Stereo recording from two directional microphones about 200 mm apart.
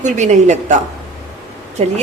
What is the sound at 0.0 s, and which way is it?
Speech, 35° right (ahead or behind).